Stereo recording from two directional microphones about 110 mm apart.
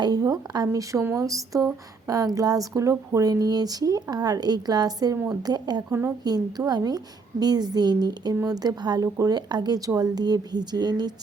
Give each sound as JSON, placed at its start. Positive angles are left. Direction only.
{"t": 0.0, "sound": "speech", "side_deg": -35}
{"t": 5.9, "sound": "speech", "side_deg": -30}